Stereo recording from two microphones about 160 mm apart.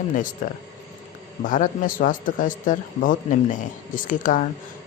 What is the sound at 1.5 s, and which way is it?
Speech, 55° left (ahead or behind).